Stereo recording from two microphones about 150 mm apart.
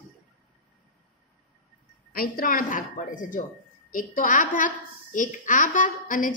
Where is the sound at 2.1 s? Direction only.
75° left (ahead or behind).